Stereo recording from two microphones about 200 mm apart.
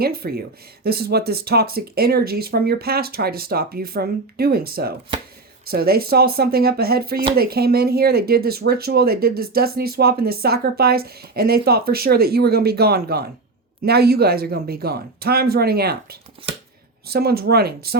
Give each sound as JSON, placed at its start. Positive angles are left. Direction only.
{"t": 0.0, "sound": "speech", "side_deg": -50}